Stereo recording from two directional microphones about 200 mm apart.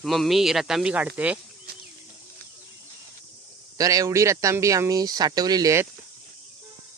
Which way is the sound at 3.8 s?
15° right (ahead or behind).